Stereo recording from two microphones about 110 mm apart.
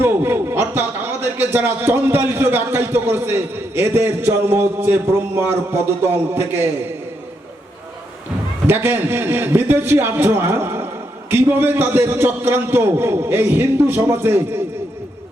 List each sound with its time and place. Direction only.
0.0 s a man's voice: 20° right (ahead or behind)
8.6 s a man's voice: 20° right (ahead or behind)